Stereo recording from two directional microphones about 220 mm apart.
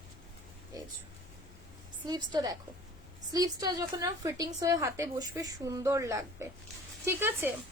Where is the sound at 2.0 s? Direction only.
20° right (ahead or behind).